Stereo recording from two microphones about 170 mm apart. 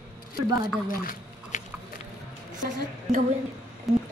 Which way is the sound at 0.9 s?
55° left (ahead or behind).